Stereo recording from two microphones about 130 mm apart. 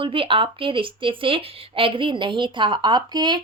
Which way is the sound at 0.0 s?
45° right (ahead or behind).